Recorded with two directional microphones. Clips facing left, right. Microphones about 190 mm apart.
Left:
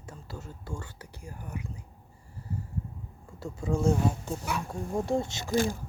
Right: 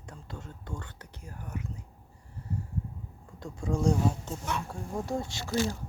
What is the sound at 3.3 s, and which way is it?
Speech, 5° left (ahead or behind).